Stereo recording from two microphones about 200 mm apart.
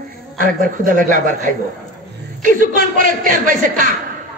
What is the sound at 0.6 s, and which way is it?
Speech, 40° right (ahead or behind).